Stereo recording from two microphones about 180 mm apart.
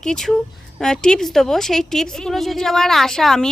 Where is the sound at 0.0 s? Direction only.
5° left (ahead or behind).